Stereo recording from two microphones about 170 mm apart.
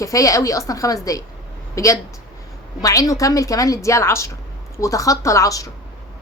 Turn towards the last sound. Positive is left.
turn(degrees=20)  # may be behind; listen again after turning